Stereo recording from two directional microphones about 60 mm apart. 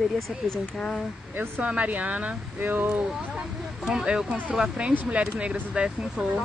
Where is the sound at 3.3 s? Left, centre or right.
Centre.